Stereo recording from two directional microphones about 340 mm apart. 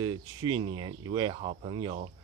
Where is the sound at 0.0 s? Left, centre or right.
Centre.